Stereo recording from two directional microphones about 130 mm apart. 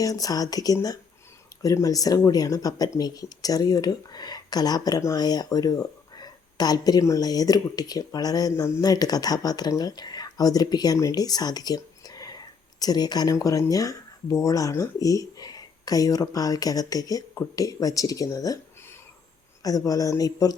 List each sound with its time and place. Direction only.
0.0 s speech: 25° left (ahead or behind)